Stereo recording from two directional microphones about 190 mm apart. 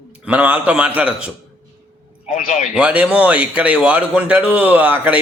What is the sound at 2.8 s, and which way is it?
A man's voice, 5° right (ahead or behind).